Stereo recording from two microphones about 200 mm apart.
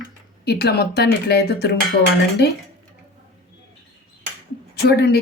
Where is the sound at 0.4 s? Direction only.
55° left (ahead or behind).